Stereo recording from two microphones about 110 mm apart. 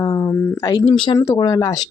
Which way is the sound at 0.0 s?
30° left (ahead or behind).